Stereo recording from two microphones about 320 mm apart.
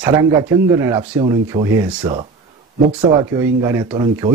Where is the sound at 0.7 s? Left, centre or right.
Centre.